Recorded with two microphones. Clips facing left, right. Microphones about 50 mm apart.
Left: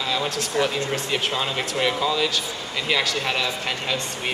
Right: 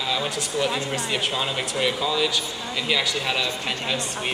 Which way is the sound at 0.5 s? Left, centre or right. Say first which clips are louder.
Left 2 dB; left.